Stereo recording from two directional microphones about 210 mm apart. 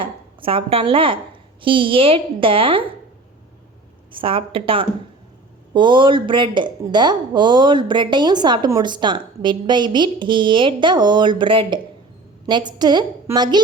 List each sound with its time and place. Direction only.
0.0 s a woman's voice: 25° right (ahead or behind)
4.1 s speech: 25° right (ahead or behind)